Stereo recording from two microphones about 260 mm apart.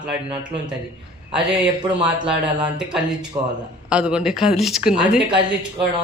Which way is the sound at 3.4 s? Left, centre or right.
Centre.